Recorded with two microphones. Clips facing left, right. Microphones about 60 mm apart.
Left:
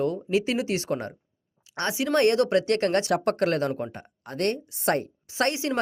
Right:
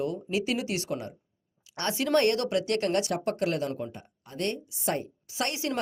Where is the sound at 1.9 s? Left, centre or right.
Centre.